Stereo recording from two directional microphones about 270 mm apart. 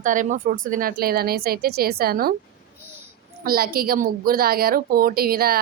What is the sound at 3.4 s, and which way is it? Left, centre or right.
A woman's voice, right.